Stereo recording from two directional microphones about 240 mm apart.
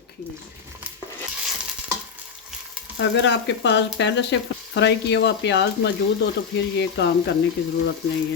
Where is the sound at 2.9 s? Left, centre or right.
Left.